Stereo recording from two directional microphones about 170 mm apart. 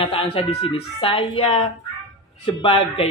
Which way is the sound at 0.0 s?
35° left (ahead or behind).